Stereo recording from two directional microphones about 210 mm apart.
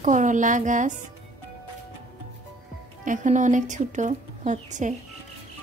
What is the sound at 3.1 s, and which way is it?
Speech, 35° right (ahead or behind).